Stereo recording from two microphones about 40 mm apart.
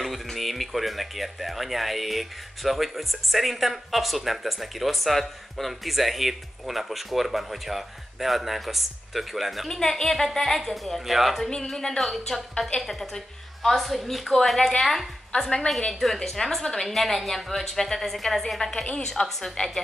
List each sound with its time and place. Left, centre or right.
0.0 s speech: centre
9.7 s a woman's voice: centre
11.3 s a woman's voice: centre
12.0 s a woman's voice: centre; by 19.7 s left